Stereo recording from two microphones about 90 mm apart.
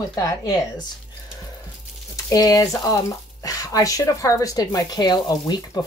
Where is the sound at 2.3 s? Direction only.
40° left (ahead or behind).